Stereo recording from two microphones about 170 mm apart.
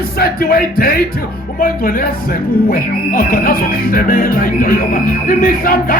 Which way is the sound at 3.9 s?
55° left (ahead or behind).